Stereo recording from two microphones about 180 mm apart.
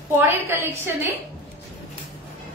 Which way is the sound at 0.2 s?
15° right (ahead or behind).